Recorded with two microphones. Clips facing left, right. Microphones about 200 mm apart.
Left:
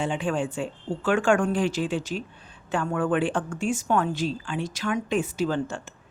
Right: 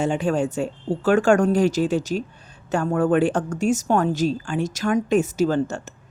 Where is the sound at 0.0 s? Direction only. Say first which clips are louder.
Right 5 dB; 40° right (ahead or behind).